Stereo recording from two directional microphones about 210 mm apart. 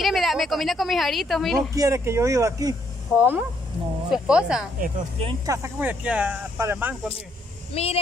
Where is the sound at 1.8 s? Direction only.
15° right (ahead or behind).